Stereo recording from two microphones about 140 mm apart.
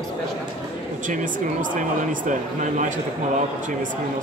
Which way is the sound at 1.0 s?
70° right (ahead or behind).